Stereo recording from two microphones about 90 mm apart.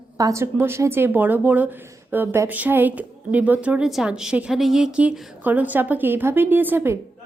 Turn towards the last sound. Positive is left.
turn(degrees=-25)  # may be behind; listen again after turning